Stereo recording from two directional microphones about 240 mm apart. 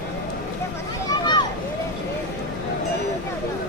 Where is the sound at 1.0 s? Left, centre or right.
Centre.